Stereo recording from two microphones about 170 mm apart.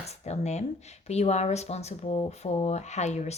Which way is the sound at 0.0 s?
40° left (ahead or behind).